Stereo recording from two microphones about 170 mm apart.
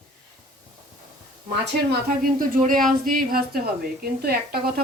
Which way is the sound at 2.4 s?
55° right (ahead or behind).